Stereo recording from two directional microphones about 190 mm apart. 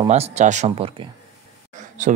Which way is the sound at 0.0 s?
35° right (ahead or behind).